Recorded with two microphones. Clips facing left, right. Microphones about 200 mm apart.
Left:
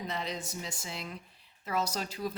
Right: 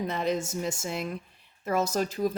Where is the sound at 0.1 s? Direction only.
50° right (ahead or behind).